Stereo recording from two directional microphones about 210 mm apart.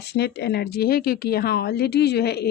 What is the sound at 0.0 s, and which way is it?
Speech, 50° left (ahead or behind).